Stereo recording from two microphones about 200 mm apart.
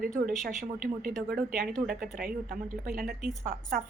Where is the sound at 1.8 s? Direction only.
45° right (ahead or behind).